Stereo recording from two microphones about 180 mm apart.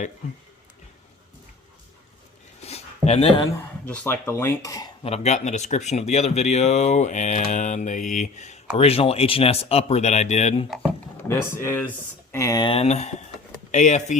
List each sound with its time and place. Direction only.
2.6 s a sound: 35° left (ahead or behind)
3.4 s speech: 10° left (ahead or behind)
5.0 s speech: 35° left (ahead or behind)
11.3 s speech: 15° left (ahead or behind); by 14.2 s 40° left (ahead or behind)